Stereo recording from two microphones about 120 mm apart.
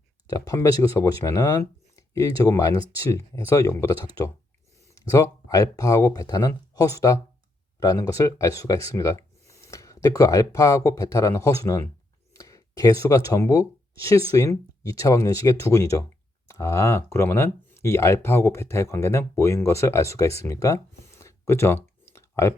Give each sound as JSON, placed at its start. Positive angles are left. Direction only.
{"t": 0.3, "sound": "speech", "side_deg": 30}
{"t": 5.1, "sound": "speech", "side_deg": 30}
{"t": 20.4, "sound": "a sound", "side_deg": 25}